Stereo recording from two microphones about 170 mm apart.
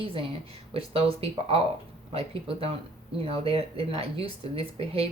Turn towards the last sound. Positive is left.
turn(degrees=-35)  # may be behind; listen again after turning